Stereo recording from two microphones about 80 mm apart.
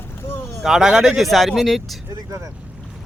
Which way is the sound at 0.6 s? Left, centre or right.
Centre.